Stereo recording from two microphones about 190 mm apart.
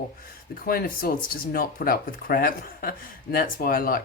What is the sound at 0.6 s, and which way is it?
Speech, 50° left (ahead or behind).